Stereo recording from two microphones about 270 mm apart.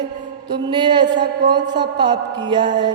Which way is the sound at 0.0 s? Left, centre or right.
Centre.